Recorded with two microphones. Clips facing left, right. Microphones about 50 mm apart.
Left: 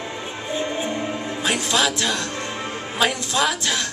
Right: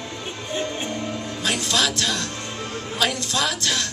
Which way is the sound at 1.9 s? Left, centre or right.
Centre.